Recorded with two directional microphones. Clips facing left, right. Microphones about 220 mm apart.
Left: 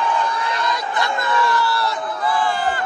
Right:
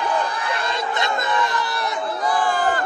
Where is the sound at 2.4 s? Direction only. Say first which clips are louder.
Right 1 dB; 50° right (ahead or behind).